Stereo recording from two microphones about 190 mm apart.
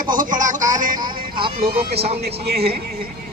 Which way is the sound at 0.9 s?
25° right (ahead or behind).